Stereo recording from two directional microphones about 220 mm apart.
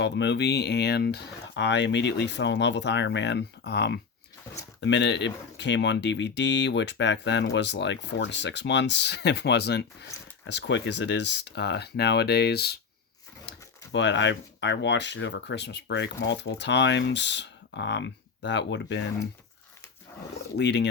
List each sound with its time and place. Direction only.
0.0 s speech: 50° left (ahead or behind)
13.9 s speech: 55° left (ahead or behind)
20.6 s speech: 50° left (ahead or behind)